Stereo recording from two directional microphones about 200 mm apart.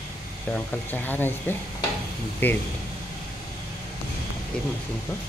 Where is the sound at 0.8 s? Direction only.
10° left (ahead or behind).